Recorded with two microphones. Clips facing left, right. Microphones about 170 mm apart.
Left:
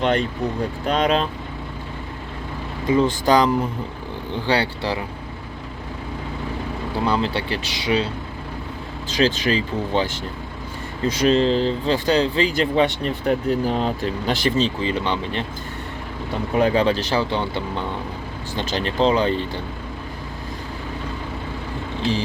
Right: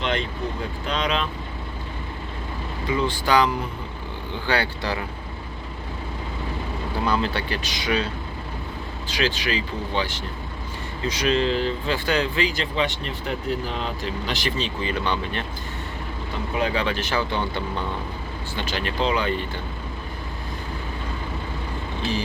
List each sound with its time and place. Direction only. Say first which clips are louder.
0.0 s speech: left 5 dB; 45° left (ahead or behind)
3.0 s speech: left 3 dB; 40° left (ahead or behind)
7.0 s speech: left 2 dB; 25° left (ahead or behind)
9.1 s speech: left 6 dB; 40° left (ahead or behind)
11.3 s speech: left 4 dB; 35° left (ahead or behind)
12.5 s speech: left 6 dB; 50° left (ahead or behind)
14.8 s speech: left 3 dB; 25° left (ahead or behind)
16.6 s speech: left 7 dB; 40° left (ahead or behind)
18.5 s speech: left 4 dB; 35° left (ahead or behind)